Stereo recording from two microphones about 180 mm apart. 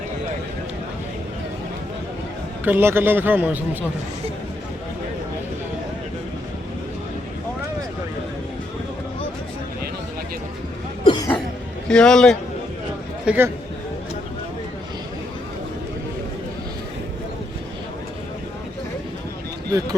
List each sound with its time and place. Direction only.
2.6 s a man's voice: 10° right (ahead or behind)
11.0 s cough: 25° left (ahead or behind)
11.9 s a man's voice: 5° left (ahead or behind)
13.2 s a man's voice: 10° right (ahead or behind)